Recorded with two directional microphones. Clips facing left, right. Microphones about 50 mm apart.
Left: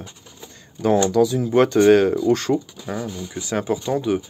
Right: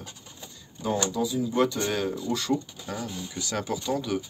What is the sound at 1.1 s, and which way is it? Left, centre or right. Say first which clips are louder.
Speech: left 9 dB; left.